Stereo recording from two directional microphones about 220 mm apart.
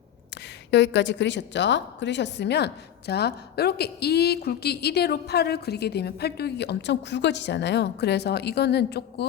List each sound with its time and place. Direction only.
0.7 s a woman's voice: 50° left (ahead or behind)